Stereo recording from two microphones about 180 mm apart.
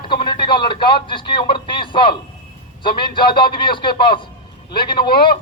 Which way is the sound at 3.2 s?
25° left (ahead or behind).